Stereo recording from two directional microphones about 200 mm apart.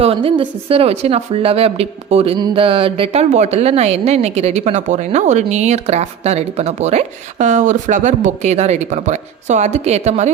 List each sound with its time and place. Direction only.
0.0 s speech: 30° right (ahead or behind)